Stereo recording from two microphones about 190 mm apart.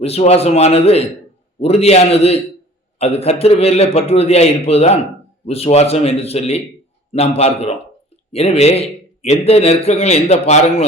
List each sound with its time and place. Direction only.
0.0 s a man's voice: 35° left (ahead or behind)